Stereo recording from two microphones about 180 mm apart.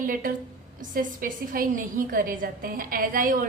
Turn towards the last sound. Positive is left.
turn(degrees=-50)  # may be behind; listen again after turning